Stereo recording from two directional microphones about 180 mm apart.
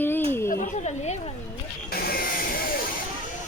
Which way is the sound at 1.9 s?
55° left (ahead or behind).